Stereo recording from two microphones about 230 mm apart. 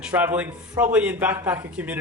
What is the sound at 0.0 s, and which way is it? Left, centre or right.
Speech, centre.